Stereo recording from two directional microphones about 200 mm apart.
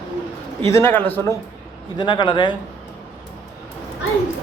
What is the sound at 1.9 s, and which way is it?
Speech, 20° left (ahead or behind).